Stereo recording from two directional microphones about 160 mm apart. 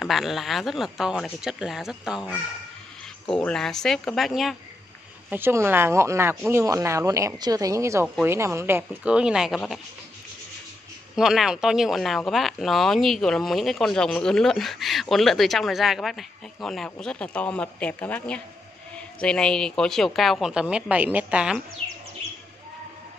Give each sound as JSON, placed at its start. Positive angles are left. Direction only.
{"t": 0.0, "sound": "speech", "side_deg": 0}
{"t": 3.3, "sound": "speech", "side_deg": 5}
{"t": 5.3, "sound": "a woman's voice", "side_deg": -15}
{"t": 11.1, "sound": "speech", "side_deg": -5}